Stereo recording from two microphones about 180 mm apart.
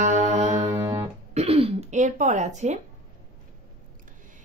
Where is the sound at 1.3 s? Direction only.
35° right (ahead or behind).